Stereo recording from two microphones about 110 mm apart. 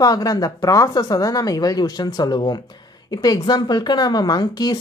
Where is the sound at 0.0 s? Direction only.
35° left (ahead or behind).